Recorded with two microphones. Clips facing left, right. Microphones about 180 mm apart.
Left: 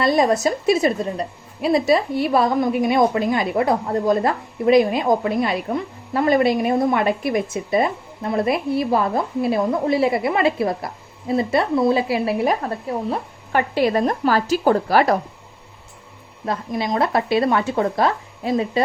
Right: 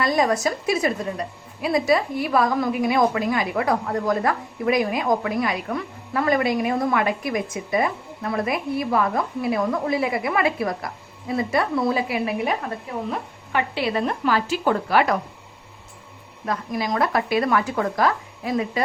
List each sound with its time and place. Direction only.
0.0 s a woman's voice: 25° left (ahead or behind)
16.5 s a woman's voice: 25° left (ahead or behind)